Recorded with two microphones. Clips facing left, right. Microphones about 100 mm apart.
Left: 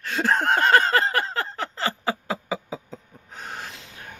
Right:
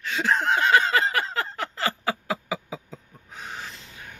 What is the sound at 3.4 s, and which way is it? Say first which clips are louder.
Snort: left 1 dB; 55° left (ahead or behind).